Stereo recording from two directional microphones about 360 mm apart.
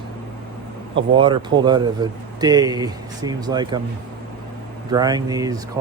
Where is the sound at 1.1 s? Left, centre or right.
Centre.